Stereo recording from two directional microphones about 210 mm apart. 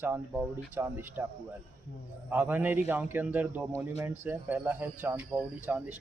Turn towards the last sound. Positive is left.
turn(degrees=-10)  # may be behind; listen again after turning